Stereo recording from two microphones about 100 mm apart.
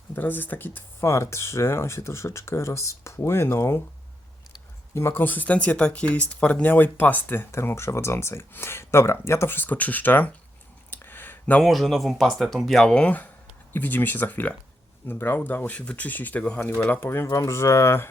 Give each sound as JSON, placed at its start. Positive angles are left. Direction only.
{"t": 0.2, "sound": "speech", "side_deg": 20}
{"t": 4.9, "sound": "speech", "side_deg": 25}
{"t": 10.9, "sound": "a sound", "side_deg": 20}
{"t": 11.6, "sound": "speech", "side_deg": 0}